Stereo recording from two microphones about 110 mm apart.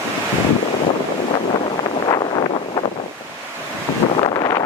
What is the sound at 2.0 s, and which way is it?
Wind, 40° left (ahead or behind).